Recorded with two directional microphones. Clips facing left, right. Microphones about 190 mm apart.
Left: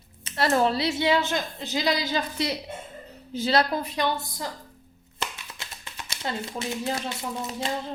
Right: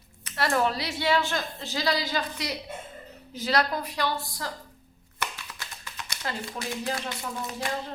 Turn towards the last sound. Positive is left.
turn(degrees=25)  # may be behind; listen again after turning